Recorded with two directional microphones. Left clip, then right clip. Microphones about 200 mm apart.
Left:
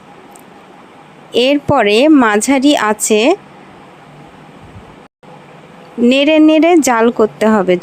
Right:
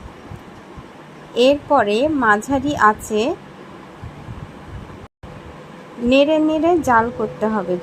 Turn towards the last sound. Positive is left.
turn(degrees=40)  # may be behind; listen again after turning